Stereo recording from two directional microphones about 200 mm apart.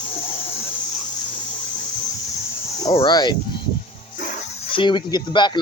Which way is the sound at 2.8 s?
25° left (ahead or behind).